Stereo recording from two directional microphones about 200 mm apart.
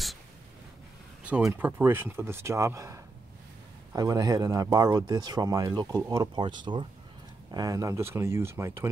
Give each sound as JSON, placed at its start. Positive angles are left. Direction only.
{"t": 1.2, "sound": "speech", "side_deg": -5}